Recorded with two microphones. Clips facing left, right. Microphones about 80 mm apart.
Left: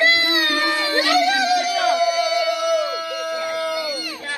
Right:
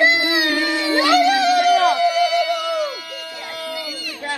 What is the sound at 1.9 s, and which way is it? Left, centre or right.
Howl, left.